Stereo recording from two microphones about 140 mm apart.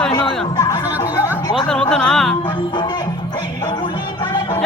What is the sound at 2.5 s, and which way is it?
Music, 30° left (ahead or behind).